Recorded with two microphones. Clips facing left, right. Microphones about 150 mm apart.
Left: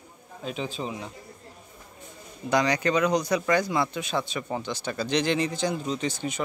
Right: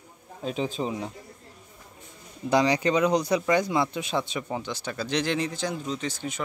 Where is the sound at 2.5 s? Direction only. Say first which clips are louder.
Right 2 dB; 25° right (ahead or behind).